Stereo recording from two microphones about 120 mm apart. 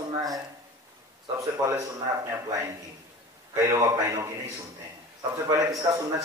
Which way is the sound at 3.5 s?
25° right (ahead or behind).